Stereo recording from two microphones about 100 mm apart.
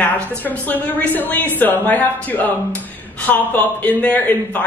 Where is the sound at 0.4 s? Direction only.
15° left (ahead or behind).